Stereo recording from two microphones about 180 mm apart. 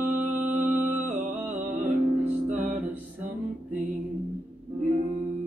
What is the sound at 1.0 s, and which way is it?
Music, 45° right (ahead or behind).